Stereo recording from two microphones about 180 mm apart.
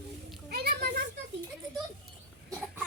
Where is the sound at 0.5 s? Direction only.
65° right (ahead or behind).